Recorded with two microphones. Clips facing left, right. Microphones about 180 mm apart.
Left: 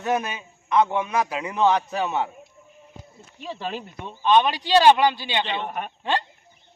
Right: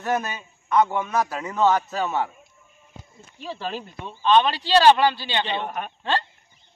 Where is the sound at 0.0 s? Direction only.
15° left (ahead or behind).